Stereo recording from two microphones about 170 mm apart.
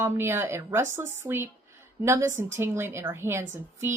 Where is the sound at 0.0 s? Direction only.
15° right (ahead or behind).